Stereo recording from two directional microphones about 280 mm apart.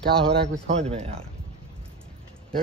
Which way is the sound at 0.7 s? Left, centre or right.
Right.